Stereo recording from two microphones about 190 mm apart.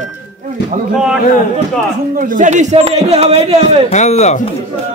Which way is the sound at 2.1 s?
45° right (ahead or behind).